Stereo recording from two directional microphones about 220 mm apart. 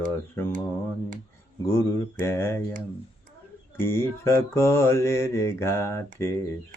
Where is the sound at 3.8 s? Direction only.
10° left (ahead or behind).